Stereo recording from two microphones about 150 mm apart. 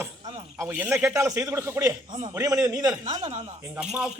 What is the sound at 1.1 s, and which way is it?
Speech, 20° right (ahead or behind).